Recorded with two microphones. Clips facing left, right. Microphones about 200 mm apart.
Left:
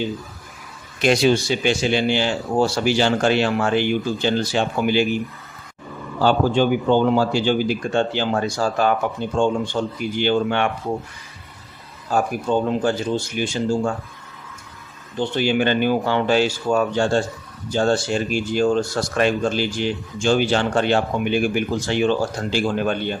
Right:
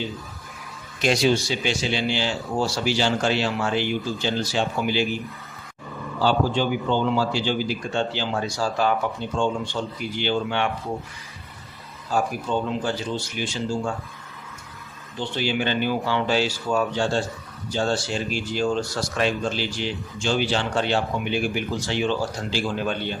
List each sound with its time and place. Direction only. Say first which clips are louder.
1.0 s speech: left 4 dB; 55° left (ahead or behind)
6.1 s speech: left 4 dB; 50° left (ahead or behind)
12.1 s speech: left 4 dB; 50° left (ahead or behind)
15.2 s speech: left 6 dB; 50° left (ahead or behind)